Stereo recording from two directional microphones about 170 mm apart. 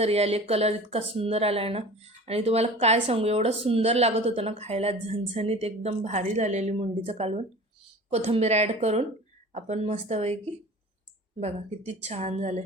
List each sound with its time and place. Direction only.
0.0 s a woman's voice: 35° right (ahead or behind)